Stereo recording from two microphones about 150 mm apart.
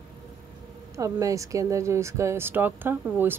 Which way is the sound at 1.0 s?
20° right (ahead or behind).